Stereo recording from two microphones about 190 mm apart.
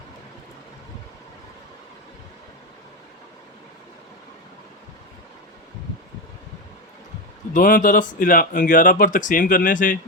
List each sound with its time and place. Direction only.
7.5 s speech: 45° left (ahead or behind)